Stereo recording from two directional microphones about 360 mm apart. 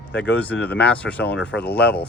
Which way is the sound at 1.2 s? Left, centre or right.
Left.